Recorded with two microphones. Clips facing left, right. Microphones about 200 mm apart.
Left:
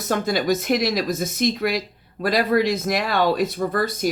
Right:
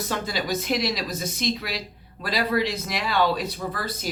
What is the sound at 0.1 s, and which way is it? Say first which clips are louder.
Speech: left 9 dB; 50° left (ahead or behind).